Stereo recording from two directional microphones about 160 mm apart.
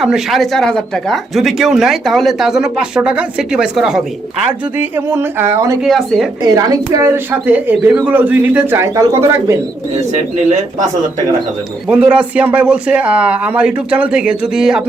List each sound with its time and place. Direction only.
0.0 s speech: centre (ahead or behind); by 5.8 s 15° right (ahead or behind)
5.8 s speech: centre (ahead or behind)
6.4 s speech: 20° right (ahead or behind)
10.1 s speech: 50° right (ahead or behind)
11.9 s speech: 5° right (ahead or behind)